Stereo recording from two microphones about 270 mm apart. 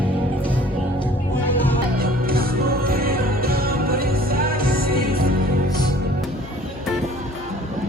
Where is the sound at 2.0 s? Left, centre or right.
Right.